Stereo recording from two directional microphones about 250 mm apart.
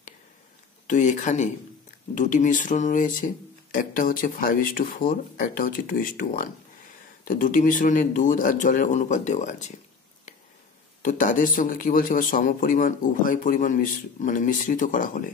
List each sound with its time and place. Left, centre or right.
0.8 s speech: left
11.0 s speech: left